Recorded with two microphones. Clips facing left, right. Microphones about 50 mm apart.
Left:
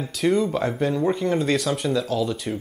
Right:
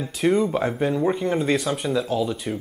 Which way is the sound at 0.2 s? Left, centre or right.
Centre.